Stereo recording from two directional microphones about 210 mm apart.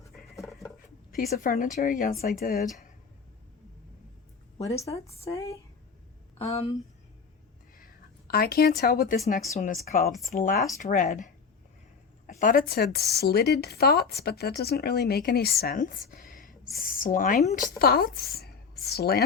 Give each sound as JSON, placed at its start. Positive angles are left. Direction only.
{"t": 0.3, "sound": "a sound", "side_deg": 0}
{"t": 1.1, "sound": "a woman's voice", "side_deg": 40}
{"t": 4.5, "sound": "a woman's voice", "side_deg": 15}
{"t": 6.4, "sound": "speech", "side_deg": 30}
{"t": 8.3, "sound": "a woman's voice", "side_deg": 45}